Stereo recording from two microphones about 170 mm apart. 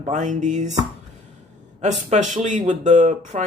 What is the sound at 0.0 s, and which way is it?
Speech, 45° right (ahead or behind).